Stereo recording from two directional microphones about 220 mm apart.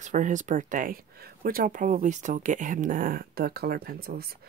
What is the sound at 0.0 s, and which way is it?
Speech, 35° right (ahead or behind).